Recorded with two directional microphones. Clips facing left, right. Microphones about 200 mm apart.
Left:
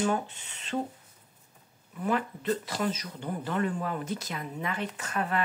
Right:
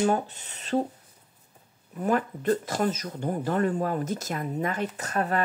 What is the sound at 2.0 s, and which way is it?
Speech, 45° right (ahead or behind).